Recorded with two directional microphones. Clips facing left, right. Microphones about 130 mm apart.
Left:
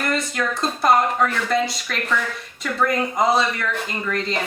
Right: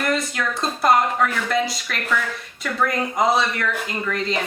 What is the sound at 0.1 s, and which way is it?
Speech, centre (ahead or behind).